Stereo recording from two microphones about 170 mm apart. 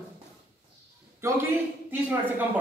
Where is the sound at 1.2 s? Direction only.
15° right (ahead or behind).